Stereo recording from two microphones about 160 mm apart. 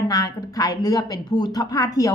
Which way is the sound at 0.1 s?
20° left (ahead or behind).